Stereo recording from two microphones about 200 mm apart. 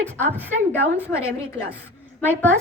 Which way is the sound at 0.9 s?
10° left (ahead or behind).